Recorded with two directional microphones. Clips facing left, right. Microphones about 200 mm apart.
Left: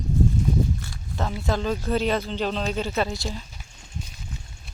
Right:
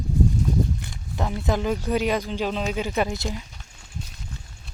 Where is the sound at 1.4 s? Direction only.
15° right (ahead or behind).